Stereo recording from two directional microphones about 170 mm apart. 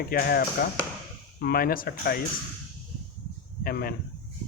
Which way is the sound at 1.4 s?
60° left (ahead or behind).